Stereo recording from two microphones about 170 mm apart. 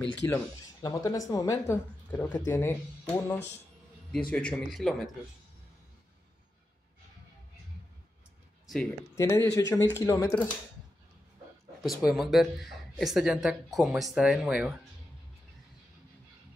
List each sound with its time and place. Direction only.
0.0 s speech: 10° left (ahead or behind)
0.8 s speech: 20° left (ahead or behind); by 5.1 s centre (ahead or behind)
9.1 s speech: 20° left (ahead or behind)
11.8 s speech: centre (ahead or behind)